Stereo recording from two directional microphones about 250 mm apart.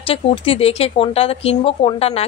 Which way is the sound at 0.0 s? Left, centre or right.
Left.